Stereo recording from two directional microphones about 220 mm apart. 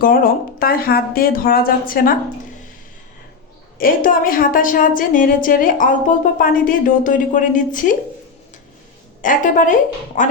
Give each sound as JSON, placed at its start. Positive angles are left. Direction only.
{"t": 0.0, "sound": "a woman's voice", "side_deg": 40}
{"t": 3.8, "sound": "a woman's voice", "side_deg": 40}
{"t": 9.2, "sound": "a woman's voice", "side_deg": 35}